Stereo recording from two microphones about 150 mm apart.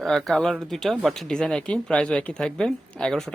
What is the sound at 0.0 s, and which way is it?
A man's voice, centre (ahead or behind).